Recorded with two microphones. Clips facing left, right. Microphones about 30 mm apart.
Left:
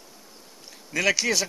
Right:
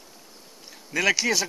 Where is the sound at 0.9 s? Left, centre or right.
Centre.